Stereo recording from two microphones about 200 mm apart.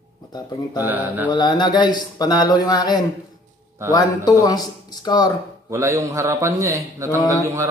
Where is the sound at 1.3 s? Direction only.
20° left (ahead or behind).